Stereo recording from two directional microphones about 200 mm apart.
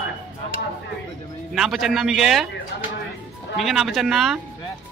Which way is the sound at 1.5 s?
Centre (ahead or behind).